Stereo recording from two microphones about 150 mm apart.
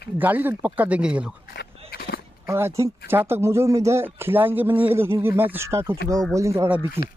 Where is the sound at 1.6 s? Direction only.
90° left.